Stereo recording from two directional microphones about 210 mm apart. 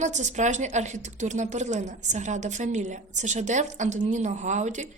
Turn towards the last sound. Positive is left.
turn(degrees=-35)  # may be behind; listen again after turning